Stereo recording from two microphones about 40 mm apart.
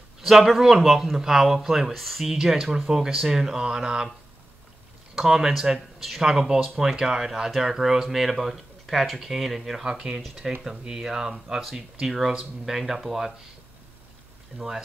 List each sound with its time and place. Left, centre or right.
0.2 s speech: centre
2.2 s speech: centre
5.1 s speech: centre
9.8 s speech: centre
10.4 s speech: centre
12.3 s speech: centre
12.7 s speech: centre